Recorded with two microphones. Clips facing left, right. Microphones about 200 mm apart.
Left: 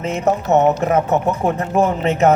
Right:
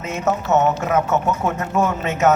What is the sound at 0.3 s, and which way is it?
Speech, 35° left (ahead or behind).